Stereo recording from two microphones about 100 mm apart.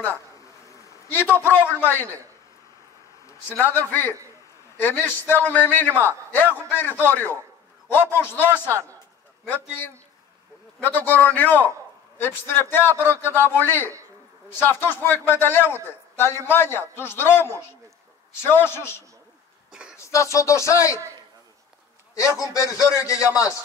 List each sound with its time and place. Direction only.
1.1 s a man's voice: 20° left (ahead or behind)
3.4 s a man's voice: 20° left (ahead or behind)
10.8 s a man's voice: 20° left (ahead or behind)
19.7 s a sound: 10° right (ahead or behind)
20.1 s a man's voice: 30° left (ahead or behind)
22.1 s a man's voice: 35° left (ahead or behind)